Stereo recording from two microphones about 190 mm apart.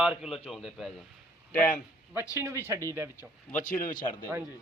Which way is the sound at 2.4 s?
15° right (ahead or behind).